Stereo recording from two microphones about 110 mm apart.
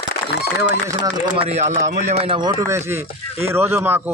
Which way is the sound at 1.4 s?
70° right (ahead or behind).